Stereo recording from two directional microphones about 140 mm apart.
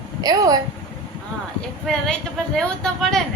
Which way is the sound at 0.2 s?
25° right (ahead or behind).